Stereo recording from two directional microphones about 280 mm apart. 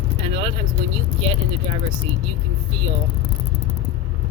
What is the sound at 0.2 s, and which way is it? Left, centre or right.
Vehicle, centre.